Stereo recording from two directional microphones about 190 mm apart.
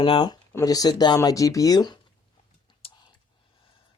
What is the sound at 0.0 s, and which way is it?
Speech, 25° left (ahead or behind).